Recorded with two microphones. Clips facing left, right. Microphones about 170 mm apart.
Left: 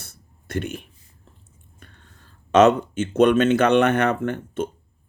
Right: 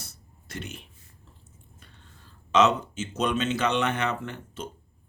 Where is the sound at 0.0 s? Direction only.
55° left (ahead or behind).